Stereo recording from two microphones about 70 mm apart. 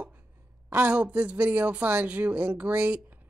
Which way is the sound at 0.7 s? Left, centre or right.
Right.